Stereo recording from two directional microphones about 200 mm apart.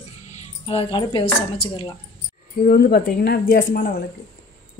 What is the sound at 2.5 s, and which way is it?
Speech, 50° left (ahead or behind).